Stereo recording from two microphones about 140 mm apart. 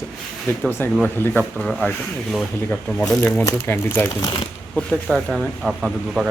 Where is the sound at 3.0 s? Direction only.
5° left (ahead or behind).